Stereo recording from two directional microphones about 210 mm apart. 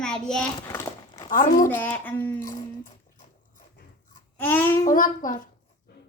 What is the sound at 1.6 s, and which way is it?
Speech, 10° left (ahead or behind).